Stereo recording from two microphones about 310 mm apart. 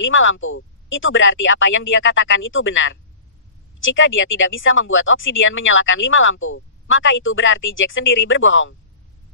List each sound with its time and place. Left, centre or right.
0.0 s speech: left